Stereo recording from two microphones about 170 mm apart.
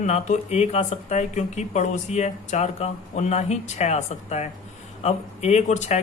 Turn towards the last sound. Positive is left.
turn(degrees=40)  # may be behind; listen again after turning